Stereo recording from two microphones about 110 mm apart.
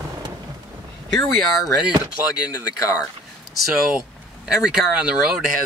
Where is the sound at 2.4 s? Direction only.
30° left (ahead or behind).